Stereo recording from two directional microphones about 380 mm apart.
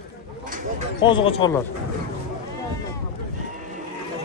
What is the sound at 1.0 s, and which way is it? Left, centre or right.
Speech, centre.